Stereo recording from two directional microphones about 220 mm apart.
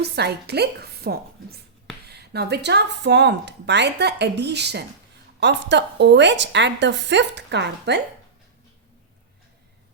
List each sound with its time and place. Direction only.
0.0 s speech: 50° right (ahead or behind)